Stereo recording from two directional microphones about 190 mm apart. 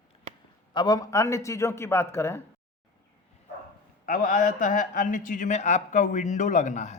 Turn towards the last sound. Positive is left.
turn(degrees=40)  # may be behind; listen again after turning